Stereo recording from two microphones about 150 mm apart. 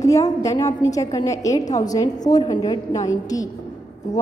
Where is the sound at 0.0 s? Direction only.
20° left (ahead or behind).